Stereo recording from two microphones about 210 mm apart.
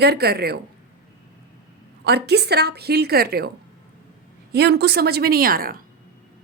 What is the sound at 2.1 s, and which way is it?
A woman's voice, 50° right (ahead or behind).